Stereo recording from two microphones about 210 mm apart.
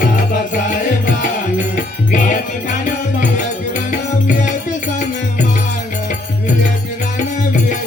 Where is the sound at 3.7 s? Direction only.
35° left (ahead or behind).